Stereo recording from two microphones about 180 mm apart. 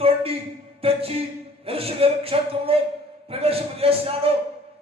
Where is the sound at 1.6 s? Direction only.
30° right (ahead or behind).